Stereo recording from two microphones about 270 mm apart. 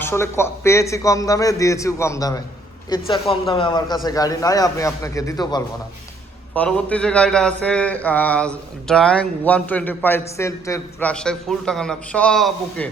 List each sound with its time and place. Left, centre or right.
0.0 s a man's voice: centre
6.5 s speech: centre